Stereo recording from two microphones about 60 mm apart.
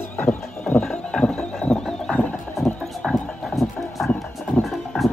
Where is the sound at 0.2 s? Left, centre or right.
Left.